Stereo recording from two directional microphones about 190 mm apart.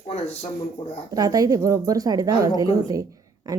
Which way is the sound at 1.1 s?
20° right (ahead or behind).